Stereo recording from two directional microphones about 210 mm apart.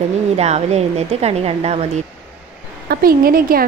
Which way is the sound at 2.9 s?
45° right (ahead or behind).